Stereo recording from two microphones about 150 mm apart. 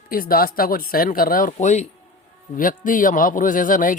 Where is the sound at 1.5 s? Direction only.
50° left (ahead or behind).